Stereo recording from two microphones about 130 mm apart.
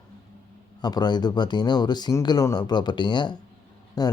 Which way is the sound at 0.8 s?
35° left (ahead or behind).